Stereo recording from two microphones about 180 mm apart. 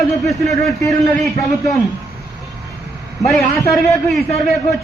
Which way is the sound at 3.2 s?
Centre (ahead or behind).